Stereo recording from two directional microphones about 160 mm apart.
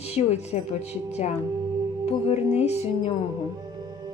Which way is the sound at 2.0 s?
40° left (ahead or behind).